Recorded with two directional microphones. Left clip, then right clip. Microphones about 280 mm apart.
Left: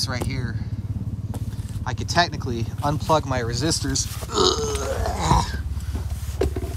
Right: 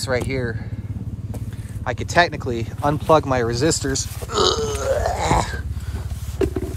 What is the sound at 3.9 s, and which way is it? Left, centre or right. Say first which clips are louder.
Speech: right 2 dB; left.